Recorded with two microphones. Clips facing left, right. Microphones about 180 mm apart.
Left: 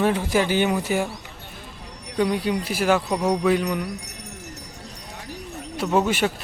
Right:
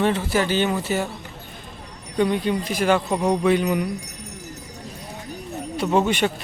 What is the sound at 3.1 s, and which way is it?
Speech, 5° right (ahead or behind).